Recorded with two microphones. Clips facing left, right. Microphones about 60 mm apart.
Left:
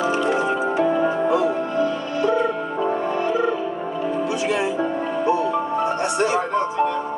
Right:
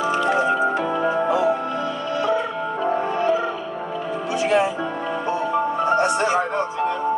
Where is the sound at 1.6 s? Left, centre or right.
Left.